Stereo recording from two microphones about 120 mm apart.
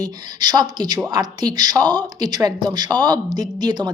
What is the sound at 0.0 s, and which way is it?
A woman's voice, 35° right (ahead or behind).